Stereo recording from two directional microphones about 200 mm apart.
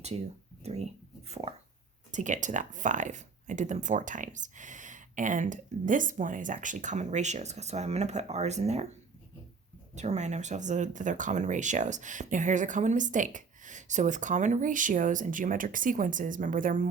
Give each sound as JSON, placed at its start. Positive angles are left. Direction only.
{"t": 0.6, "sound": "speech", "side_deg": -35}